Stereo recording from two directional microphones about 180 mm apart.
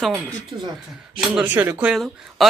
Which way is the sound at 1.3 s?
5° right (ahead or behind).